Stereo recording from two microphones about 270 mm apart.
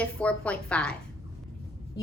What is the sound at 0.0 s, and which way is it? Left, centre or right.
Speech, centre.